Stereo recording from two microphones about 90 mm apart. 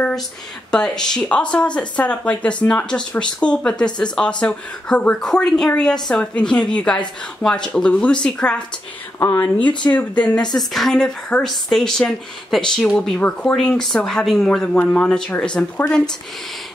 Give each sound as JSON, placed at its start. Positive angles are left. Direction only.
{"t": 0.7, "sound": "speech", "side_deg": 5}
{"t": 9.7, "sound": "speech", "side_deg": 60}
{"t": 9.9, "sound": "speech", "side_deg": 10}
{"t": 14.8, "sound": "speech", "side_deg": 15}